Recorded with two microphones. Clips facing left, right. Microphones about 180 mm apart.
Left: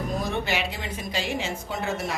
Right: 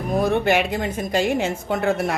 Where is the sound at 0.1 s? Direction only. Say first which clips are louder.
Right 12 dB; 60° right (ahead or behind).